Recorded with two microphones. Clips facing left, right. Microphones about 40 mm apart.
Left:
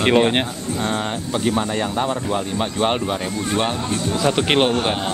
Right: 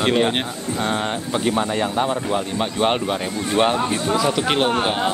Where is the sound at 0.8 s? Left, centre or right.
Centre.